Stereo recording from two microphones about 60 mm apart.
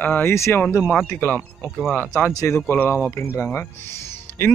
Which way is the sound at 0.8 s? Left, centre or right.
Left.